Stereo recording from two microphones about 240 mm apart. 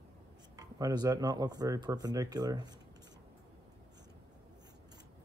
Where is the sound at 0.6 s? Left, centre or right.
Centre.